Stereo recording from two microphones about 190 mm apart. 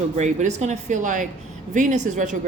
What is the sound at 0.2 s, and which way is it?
A woman's voice, 35° right (ahead or behind).